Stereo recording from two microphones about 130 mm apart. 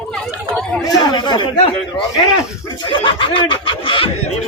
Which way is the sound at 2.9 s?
40° left (ahead or behind).